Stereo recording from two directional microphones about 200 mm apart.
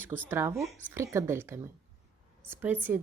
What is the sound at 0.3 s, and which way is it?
A woman's voice, 10° right (ahead or behind).